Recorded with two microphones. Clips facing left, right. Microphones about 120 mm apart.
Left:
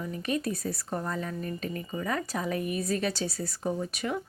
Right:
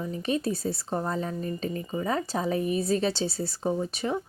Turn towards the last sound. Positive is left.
turn(degrees=-30)  # may be behind; listen again after turning